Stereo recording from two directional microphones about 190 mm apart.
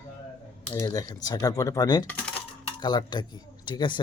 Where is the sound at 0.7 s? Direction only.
15° left (ahead or behind).